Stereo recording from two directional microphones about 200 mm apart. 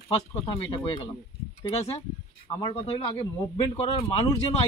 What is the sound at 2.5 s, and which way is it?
Speech, 30° left (ahead or behind).